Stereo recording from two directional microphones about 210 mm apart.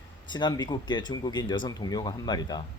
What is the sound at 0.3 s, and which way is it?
Speech, 20° left (ahead or behind).